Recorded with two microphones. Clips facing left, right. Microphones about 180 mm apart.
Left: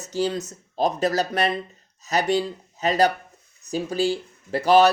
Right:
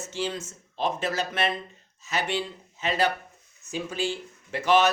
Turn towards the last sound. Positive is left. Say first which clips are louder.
# left 5 dB
turn(degrees=35)  # may be behind; listen again after turning